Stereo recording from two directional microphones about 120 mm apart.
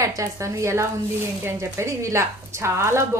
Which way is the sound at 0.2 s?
25° right (ahead or behind).